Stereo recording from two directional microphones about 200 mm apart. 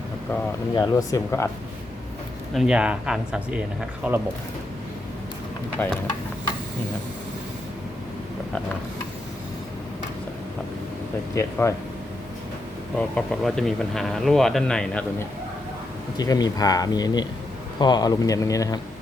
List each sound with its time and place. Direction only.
0.8 s speech: 15° left (ahead or behind)
2.6 s speech: 5° right (ahead or behind)
5.8 s speech: 10° left (ahead or behind)
11.3 s speech: 15° left (ahead or behind)
13.0 s speech: 5° left (ahead or behind)
16.1 s speech: 20° left (ahead or behind)